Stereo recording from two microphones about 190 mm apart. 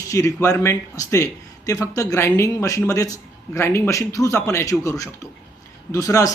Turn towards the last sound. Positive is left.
turn(degrees=15)  # may be behind; listen again after turning